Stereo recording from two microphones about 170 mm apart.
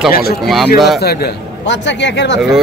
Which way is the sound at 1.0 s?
70° left (ahead or behind).